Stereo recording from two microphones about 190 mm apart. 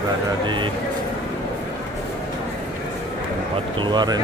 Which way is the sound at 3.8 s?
20° right (ahead or behind).